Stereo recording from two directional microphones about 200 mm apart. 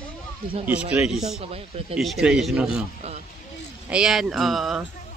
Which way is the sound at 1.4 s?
30° right (ahead or behind).